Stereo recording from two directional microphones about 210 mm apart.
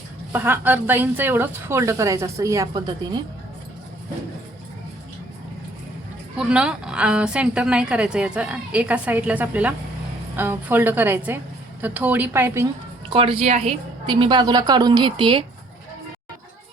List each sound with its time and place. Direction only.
0.3 s a woman's voice: 10° right (ahead or behind)
6.3 s a woman's voice: 5° right (ahead or behind)
13.1 s a woman's voice: 25° right (ahead or behind)